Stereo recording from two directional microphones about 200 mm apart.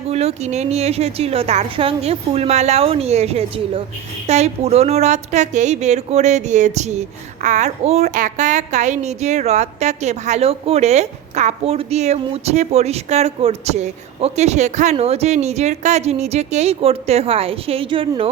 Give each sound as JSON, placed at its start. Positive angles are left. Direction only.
{"t": 0.1, "sound": "speech", "side_deg": -30}